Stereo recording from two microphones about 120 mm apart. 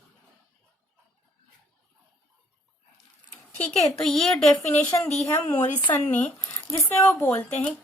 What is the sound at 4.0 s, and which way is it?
Speech, 5° left (ahead or behind).